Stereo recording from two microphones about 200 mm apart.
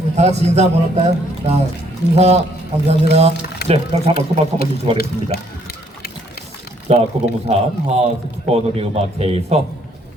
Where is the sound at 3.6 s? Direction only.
55° left (ahead or behind).